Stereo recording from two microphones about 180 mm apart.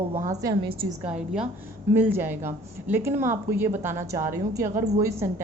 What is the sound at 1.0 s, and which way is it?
A woman's voice, 5° right (ahead or behind).